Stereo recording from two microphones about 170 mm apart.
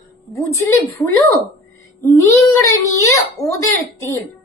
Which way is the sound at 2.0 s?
15° left (ahead or behind).